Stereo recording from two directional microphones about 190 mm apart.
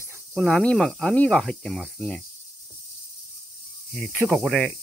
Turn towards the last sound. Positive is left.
turn(degrees=0)  # may be behind; listen again after turning